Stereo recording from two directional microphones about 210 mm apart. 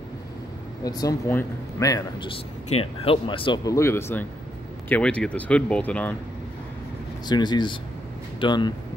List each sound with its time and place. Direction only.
0.8 s a man's voice: 15° left (ahead or behind)
7.2 s speech: 20° left (ahead or behind)